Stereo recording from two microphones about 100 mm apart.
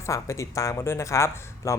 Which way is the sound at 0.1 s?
30° left (ahead or behind).